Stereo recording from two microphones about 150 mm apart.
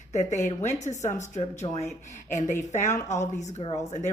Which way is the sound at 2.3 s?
55° left (ahead or behind).